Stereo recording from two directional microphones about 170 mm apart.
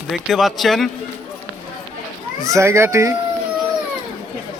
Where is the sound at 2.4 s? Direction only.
15° right (ahead or behind).